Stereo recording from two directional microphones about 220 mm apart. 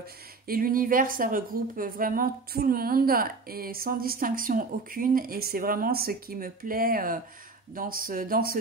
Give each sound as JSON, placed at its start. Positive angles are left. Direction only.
{"t": 0.5, "sound": "a woman's voice", "side_deg": -40}